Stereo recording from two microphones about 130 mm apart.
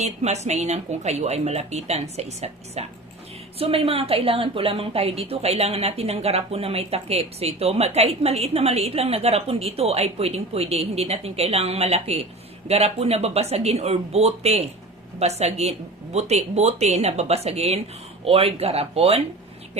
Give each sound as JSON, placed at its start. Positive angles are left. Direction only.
{"t": 0.0, "sound": "a woman's voice", "side_deg": -60}